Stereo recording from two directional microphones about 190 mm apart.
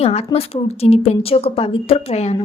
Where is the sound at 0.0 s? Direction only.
30° left (ahead or behind).